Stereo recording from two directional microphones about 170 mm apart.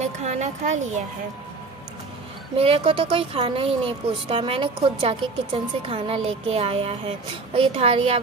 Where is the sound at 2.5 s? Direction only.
35° right (ahead or behind).